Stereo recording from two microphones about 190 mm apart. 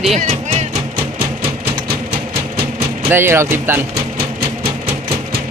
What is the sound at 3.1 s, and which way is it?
Speech, 10° right (ahead or behind).